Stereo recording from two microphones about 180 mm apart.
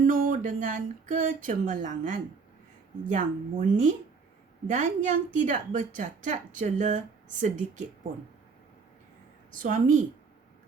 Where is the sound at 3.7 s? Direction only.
45° right (ahead or behind).